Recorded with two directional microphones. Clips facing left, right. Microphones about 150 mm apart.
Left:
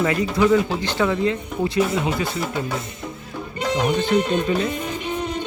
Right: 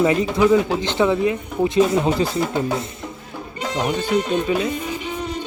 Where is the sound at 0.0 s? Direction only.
20° right (ahead or behind).